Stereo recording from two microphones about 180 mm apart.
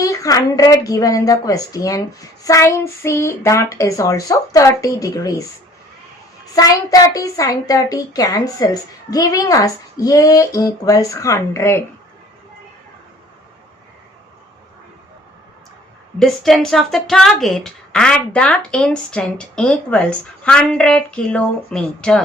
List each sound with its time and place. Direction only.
0.0 s a woman's voice: 20° left (ahead or behind)
6.5 s a woman's voice: 20° left (ahead or behind)
16.1 s speech: centre (ahead or behind)